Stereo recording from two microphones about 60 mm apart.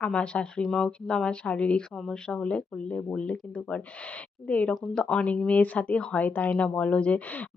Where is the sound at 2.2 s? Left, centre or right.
Centre.